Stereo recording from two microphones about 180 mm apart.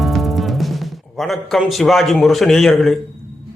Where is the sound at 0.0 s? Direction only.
Centre (ahead or behind).